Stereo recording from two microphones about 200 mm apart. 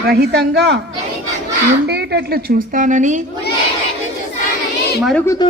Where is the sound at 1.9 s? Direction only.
55° right (ahead or behind).